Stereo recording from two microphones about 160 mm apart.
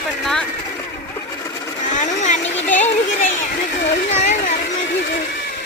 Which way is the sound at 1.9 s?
50° left (ahead or behind).